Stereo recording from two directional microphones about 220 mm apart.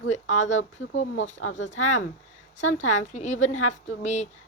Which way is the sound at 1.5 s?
35° left (ahead or behind).